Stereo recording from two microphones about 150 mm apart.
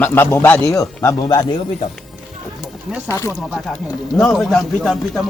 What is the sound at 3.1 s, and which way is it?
Speech, 20° left (ahead or behind).